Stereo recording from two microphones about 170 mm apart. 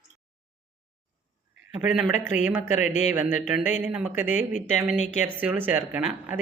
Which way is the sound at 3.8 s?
5° right (ahead or behind).